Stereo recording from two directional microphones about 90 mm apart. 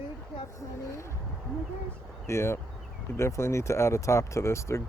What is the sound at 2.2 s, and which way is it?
Speech, 30° left (ahead or behind).